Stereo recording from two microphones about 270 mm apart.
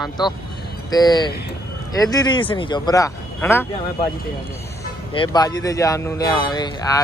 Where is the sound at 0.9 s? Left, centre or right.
Centre.